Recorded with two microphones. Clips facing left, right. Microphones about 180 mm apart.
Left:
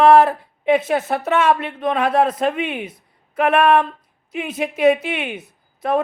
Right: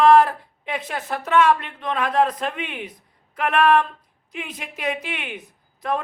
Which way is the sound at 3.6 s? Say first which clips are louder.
Left 2 dB; 20° left (ahead or behind).